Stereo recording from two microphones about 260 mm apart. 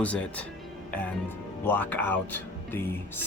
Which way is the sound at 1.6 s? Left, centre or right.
Centre.